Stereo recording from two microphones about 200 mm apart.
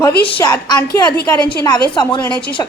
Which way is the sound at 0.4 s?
15° left (ahead or behind).